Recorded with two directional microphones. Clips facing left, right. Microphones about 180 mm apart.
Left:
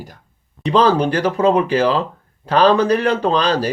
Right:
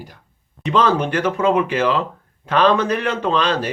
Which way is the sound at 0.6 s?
35° left (ahead or behind).